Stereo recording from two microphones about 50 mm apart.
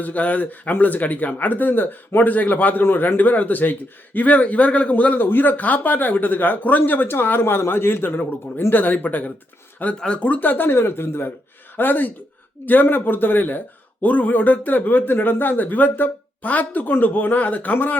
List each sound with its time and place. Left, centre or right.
0.0 s speech: left
8.7 s speech: left
10.0 s speech: left
11.8 s speech: left